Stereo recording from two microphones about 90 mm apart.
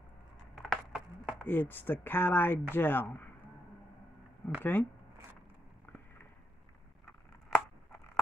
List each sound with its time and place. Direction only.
0.6 s a sound: 5° right (ahead or behind)
1.4 s speech: 20° left (ahead or behind)
4.6 s speech: 20° left (ahead or behind)